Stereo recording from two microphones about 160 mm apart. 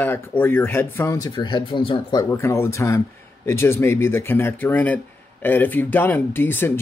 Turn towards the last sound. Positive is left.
turn(degrees=10)  # may be behind; listen again after turning